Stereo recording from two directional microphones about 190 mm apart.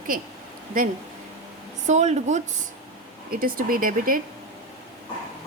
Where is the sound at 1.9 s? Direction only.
40° right (ahead or behind).